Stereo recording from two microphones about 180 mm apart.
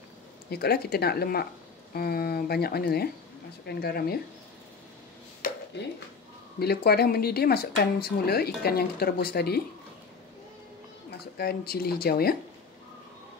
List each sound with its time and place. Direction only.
0.5 s speech: 60° left (ahead or behind)
6.6 s speech: 60° left (ahead or behind)
11.1 s speech: 60° left (ahead or behind)